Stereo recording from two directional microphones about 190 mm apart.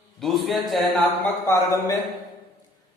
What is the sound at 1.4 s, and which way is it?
Speech, 15° left (ahead or behind).